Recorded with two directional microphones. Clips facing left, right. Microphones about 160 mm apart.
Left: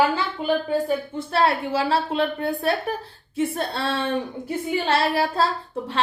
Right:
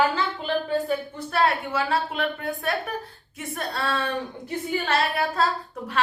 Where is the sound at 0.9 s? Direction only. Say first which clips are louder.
Left 3 dB; 30° left (ahead or behind).